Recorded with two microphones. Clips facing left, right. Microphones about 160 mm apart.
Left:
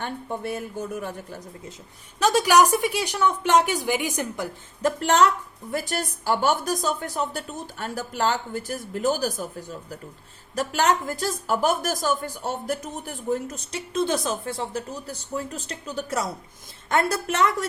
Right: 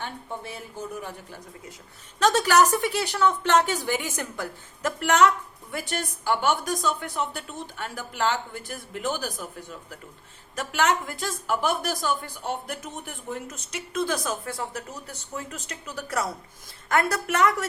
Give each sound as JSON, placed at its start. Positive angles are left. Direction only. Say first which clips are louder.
{"t": 0.0, "sound": "speech", "louder": "left 5 dB", "side_deg": 50}
{"t": 2.1, "sound": "speech", "louder": "left 2 dB", "side_deg": 10}
{"t": 4.8, "sound": "a woman's voice", "louder": "left 1 dB", "side_deg": 30}